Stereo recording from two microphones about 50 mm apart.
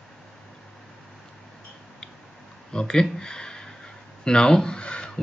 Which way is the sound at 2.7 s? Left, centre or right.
Centre.